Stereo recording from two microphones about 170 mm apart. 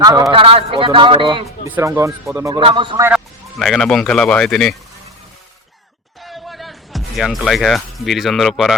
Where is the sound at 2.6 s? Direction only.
30° right (ahead or behind).